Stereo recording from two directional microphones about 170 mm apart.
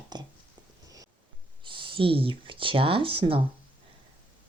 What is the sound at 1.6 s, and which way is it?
Speech, 30° right (ahead or behind).